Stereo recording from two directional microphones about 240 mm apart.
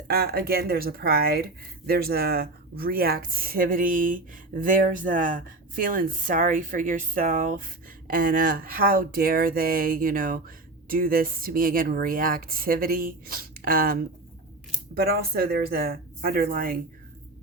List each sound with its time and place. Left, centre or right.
0.1 s speech: right
15.0 s speech: right